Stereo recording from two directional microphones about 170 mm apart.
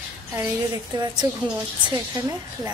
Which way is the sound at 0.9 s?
25° right (ahead or behind).